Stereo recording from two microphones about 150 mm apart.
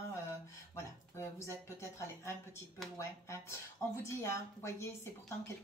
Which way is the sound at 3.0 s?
20° left (ahead or behind).